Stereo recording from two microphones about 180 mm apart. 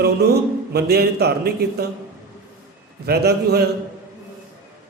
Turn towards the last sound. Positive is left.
turn(degrees=-65)  # may be behind; listen again after turning